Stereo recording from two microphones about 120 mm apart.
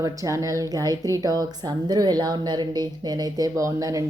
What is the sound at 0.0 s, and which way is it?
A woman's voice, 25° right (ahead or behind).